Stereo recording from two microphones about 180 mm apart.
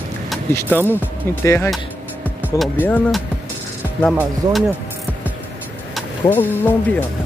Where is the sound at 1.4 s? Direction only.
15° left (ahead or behind).